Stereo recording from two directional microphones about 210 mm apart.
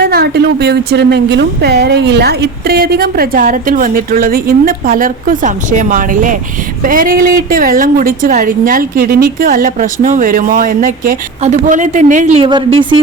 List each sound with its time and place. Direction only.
0.0 s a woman's voice: 50° right (ahead or behind); by 12.5 s 35° right (ahead or behind)